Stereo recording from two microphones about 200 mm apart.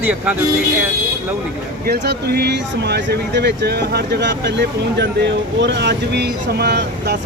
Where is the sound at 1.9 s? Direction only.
55° right (ahead or behind).